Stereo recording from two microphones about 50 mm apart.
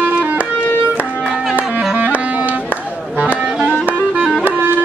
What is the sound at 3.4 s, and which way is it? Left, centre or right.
Music, centre.